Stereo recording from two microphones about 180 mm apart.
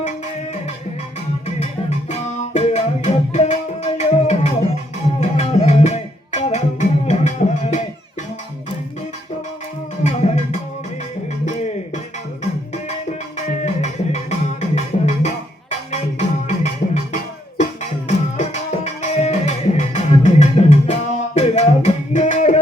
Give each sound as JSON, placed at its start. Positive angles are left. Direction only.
{"t": 1.5, "sound": "music", "side_deg": 40}
{"t": 10.0, "sound": "music", "side_deg": 40}
{"t": 18.3, "sound": "music", "side_deg": 40}